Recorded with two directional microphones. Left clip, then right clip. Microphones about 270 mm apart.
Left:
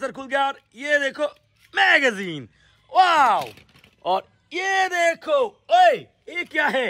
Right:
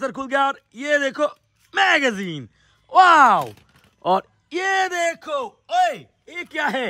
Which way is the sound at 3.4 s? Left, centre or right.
Centre.